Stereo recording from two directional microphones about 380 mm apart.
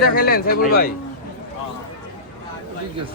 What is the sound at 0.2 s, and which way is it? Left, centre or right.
Speech, left.